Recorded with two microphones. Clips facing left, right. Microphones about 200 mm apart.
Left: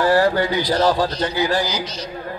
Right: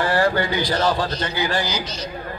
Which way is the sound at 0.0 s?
5° left (ahead or behind).